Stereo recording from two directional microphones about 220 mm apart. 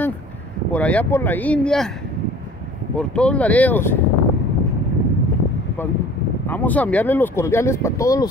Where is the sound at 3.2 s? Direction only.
5° left (ahead or behind).